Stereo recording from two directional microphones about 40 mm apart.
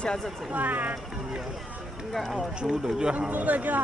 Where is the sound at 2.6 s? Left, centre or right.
Right.